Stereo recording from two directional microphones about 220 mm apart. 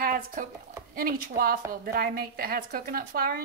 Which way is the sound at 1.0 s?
40° right (ahead or behind).